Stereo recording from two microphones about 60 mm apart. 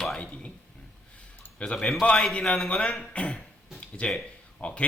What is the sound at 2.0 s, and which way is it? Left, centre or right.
Speech, centre.